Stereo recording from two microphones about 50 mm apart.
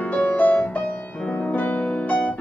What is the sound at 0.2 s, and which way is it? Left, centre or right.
Music, left.